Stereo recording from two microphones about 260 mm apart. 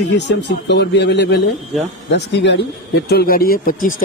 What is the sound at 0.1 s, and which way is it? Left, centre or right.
Speech, left.